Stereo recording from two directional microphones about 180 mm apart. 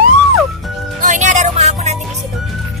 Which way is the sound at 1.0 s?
45° right (ahead or behind).